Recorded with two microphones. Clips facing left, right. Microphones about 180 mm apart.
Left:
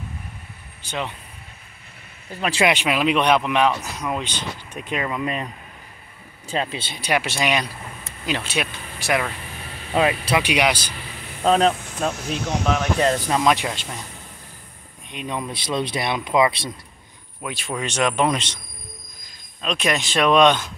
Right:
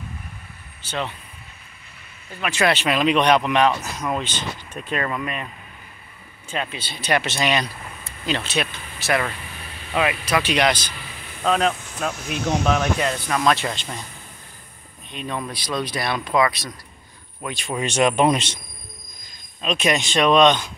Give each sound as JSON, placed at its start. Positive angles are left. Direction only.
{"t": 0.8, "sound": "speech", "side_deg": 15}
{"t": 2.6, "sound": "speech", "side_deg": 15}
{"t": 5.2, "sound": "speech", "side_deg": 30}
{"t": 6.5, "sound": "speech", "side_deg": 30}
{"t": 6.9, "sound": "speech", "side_deg": 10}
{"t": 9.9, "sound": "speech", "side_deg": 35}
{"t": 10.3, "sound": "speech", "side_deg": 10}
{"t": 11.4, "sound": "speech", "side_deg": 30}
{"t": 13.3, "sound": "speech", "side_deg": 15}
{"t": 15.0, "sound": "speech", "side_deg": 15}
{"t": 17.4, "sound": "speech", "side_deg": 5}
{"t": 17.8, "sound": "speech", "side_deg": -10}
{"t": 19.6, "sound": "speech", "side_deg": 0}